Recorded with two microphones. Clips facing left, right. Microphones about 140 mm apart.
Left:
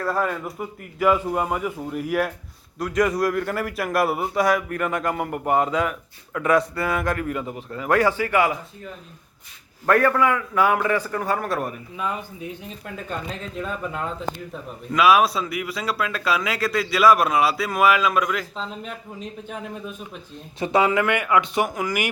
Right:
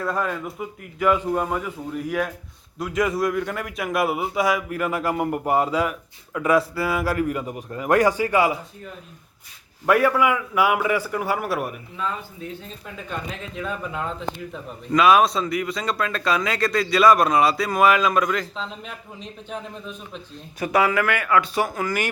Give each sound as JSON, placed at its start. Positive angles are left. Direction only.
{"t": 0.0, "sound": "a man's voice", "side_deg": 0}
{"t": 9.8, "sound": "a man's voice", "side_deg": -10}
{"t": 11.9, "sound": "a man's voice", "side_deg": 15}
{"t": 14.9, "sound": "a man's voice", "side_deg": 5}
{"t": 20.6, "sound": "speech", "side_deg": 25}